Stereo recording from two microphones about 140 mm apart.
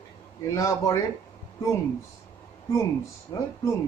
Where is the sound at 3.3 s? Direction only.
25° left (ahead or behind).